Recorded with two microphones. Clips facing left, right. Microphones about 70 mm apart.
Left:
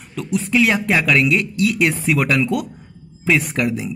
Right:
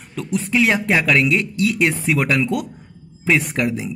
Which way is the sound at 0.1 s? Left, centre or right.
Right.